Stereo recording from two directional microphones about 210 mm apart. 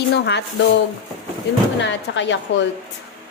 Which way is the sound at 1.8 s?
60° left (ahead or behind).